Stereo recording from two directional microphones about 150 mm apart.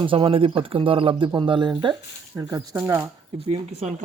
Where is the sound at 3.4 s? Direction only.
45° right (ahead or behind).